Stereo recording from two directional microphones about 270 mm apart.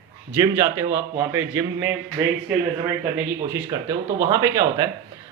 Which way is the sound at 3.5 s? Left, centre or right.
Centre.